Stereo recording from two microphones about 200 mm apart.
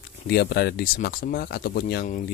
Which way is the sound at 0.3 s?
50° left (ahead or behind).